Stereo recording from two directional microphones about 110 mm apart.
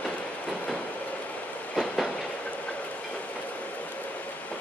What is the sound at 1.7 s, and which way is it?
Train, 5° left (ahead or behind).